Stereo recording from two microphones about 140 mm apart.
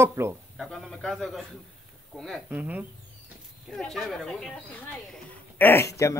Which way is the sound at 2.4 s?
10° right (ahead or behind).